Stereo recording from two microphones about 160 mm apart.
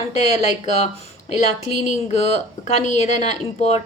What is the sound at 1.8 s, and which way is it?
A woman's voice, 45° left (ahead or behind).